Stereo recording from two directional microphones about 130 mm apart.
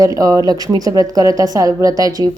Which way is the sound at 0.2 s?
25° right (ahead or behind).